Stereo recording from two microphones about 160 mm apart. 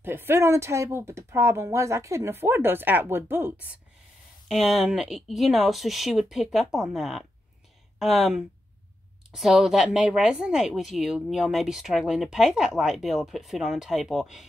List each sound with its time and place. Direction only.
0.0 s speech: 15° right (ahead or behind)
4.5 s speech: centre (ahead or behind)